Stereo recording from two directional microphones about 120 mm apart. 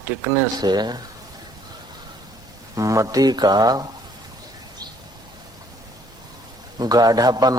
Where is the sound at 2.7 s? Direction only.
25° right (ahead or behind).